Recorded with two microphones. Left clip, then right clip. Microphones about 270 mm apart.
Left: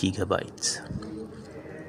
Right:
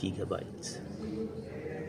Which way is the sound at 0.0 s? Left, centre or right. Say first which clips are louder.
Left 9 dB; left.